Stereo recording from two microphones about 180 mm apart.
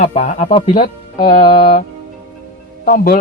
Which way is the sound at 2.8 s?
50° left (ahead or behind).